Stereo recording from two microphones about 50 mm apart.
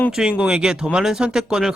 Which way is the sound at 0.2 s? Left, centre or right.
Centre.